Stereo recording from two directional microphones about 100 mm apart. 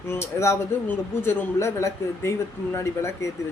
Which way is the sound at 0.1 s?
30° left (ahead or behind).